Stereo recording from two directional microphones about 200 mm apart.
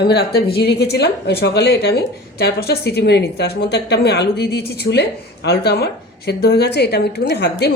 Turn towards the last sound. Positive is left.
turn(degrees=55)  # may be behind; listen again after turning